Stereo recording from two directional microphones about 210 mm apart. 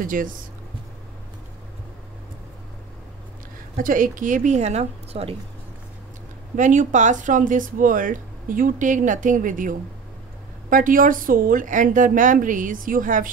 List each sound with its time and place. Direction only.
0.0 s speech: 40° right (ahead or behind)
3.7 s speech: 40° right (ahead or behind)
6.5 s speech: 35° right (ahead or behind)